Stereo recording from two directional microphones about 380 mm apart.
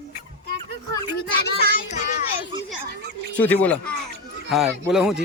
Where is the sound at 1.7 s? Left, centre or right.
Centre.